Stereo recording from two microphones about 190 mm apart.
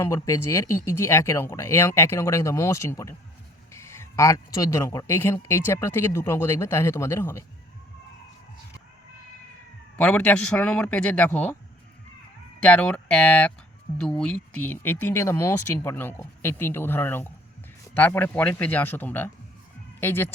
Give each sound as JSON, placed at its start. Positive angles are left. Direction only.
{"t": 0.0, "sound": "speech", "side_deg": 15}
{"t": 10.0, "sound": "speech", "side_deg": 5}
{"t": 12.6, "sound": "speech", "side_deg": 5}